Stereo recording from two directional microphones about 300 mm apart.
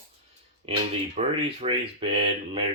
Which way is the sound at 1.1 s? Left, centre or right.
Centre.